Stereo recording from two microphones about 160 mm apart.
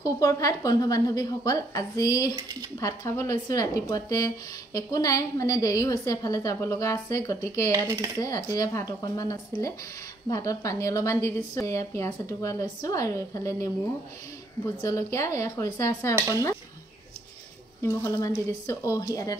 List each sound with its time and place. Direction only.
0.0 s a woman's voice: 20° left (ahead or behind)
14.8 s a woman's voice: 20° left (ahead or behind)
17.8 s a woman's voice: 15° left (ahead or behind)